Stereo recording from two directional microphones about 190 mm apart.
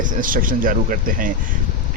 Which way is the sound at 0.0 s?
45° right (ahead or behind).